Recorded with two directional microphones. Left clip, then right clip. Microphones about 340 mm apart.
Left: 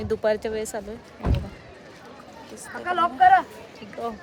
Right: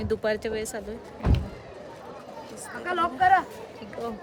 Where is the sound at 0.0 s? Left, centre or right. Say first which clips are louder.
Left 3 dB; centre.